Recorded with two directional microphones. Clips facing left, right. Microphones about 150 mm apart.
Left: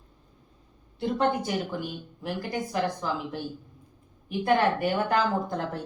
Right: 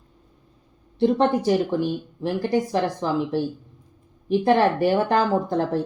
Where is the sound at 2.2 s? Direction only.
35° right (ahead or behind).